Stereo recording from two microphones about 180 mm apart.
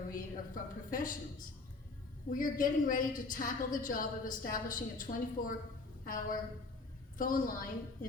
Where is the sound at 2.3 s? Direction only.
50° left (ahead or behind).